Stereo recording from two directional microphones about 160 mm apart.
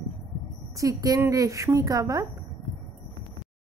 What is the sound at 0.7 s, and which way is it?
A woman's voice, 20° right (ahead or behind).